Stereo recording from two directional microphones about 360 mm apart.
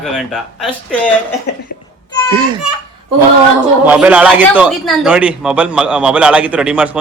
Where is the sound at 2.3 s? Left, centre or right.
Centre.